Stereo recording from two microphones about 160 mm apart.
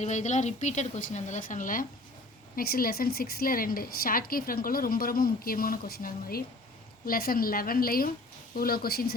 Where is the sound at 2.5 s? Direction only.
65° left (ahead or behind).